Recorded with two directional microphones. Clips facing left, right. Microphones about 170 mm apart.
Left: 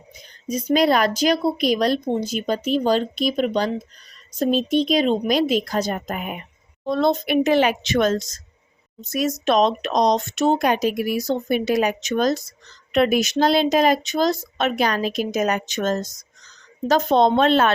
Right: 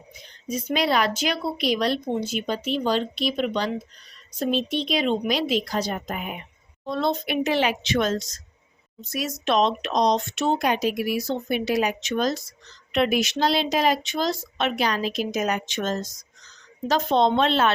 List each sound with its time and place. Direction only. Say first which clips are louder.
0.4 s speech: left 6 dB; 40° left (ahead or behind)